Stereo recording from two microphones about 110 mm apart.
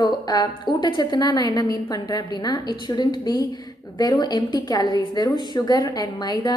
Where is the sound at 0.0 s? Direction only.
40° left (ahead or behind).